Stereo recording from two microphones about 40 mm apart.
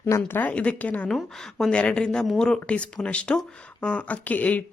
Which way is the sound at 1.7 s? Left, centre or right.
Left.